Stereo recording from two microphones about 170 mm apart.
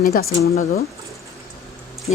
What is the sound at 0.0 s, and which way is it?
Speech, 65° left (ahead or behind).